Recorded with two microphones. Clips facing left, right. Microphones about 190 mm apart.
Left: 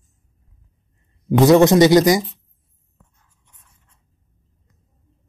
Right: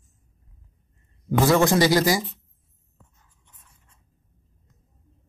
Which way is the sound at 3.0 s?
5° right (ahead or behind).